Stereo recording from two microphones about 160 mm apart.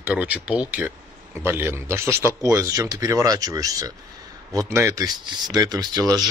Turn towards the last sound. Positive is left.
turn(degrees=-25)  # may be behind; listen again after turning